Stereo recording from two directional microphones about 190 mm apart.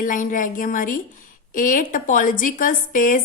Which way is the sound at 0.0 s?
45° left (ahead or behind).